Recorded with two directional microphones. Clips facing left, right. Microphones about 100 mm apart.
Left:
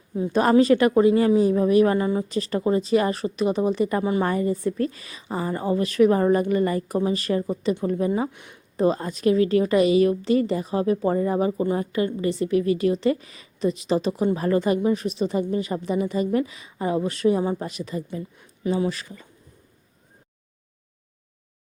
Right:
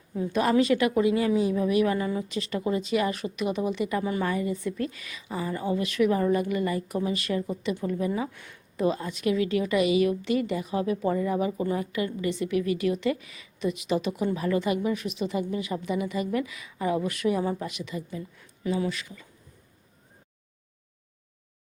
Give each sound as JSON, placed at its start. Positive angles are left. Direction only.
{"t": 0.4, "sound": "a woman's voice", "side_deg": 40}
{"t": 4.0, "sound": "a woman's voice", "side_deg": 25}
{"t": 4.3, "sound": "a woman's voice", "side_deg": 40}
{"t": 8.3, "sound": "a woman's voice", "side_deg": 20}
{"t": 8.7, "sound": "a woman's voice", "side_deg": 35}
{"t": 18.3, "sound": "speech", "side_deg": 25}